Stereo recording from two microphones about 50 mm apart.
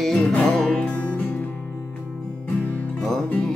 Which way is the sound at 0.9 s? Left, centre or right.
Left.